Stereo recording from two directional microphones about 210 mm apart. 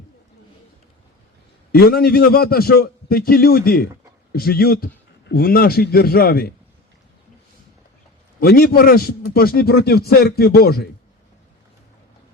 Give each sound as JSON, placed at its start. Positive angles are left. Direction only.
{"t": 1.7, "sound": "a man's voice", "side_deg": 45}
{"t": 8.4, "sound": "a man's voice", "side_deg": 45}